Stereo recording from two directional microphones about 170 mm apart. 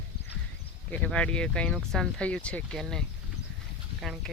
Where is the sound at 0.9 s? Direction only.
5° left (ahead or behind).